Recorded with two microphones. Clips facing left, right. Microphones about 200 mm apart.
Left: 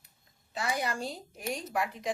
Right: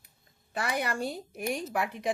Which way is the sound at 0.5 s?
60° right (ahead or behind).